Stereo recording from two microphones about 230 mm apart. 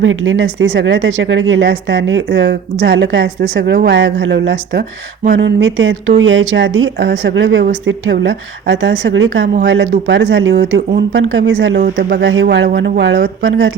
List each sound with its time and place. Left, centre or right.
0.0 s a woman's voice: right